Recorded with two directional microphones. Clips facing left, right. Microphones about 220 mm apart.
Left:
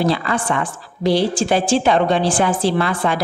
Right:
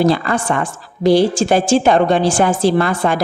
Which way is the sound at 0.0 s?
45° right (ahead or behind).